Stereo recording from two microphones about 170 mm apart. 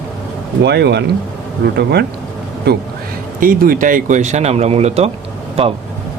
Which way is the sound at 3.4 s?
55° right (ahead or behind).